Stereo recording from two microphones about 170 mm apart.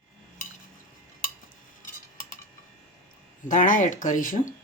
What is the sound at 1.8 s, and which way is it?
Cutlery, 50° left (ahead or behind).